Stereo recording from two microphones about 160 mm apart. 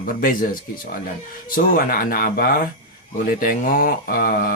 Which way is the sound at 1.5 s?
65° left (ahead or behind).